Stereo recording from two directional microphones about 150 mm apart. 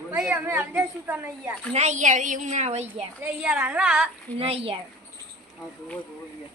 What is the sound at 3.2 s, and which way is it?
Speech, 10° right (ahead or behind).